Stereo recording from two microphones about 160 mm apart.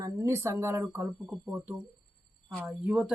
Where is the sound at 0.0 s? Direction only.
20° right (ahead or behind).